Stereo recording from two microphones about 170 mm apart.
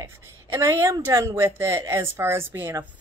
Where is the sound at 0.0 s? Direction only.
20° right (ahead or behind).